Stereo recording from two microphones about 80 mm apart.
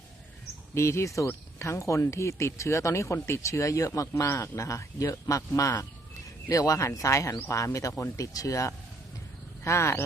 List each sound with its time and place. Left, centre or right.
0.7 s speech: left